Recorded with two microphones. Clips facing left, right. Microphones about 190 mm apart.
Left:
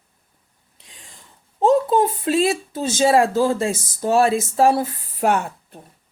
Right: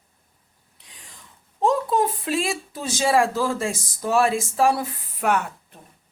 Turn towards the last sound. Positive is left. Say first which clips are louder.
# left 3 dB
turn(degrees=30)  # may be behind; listen again after turning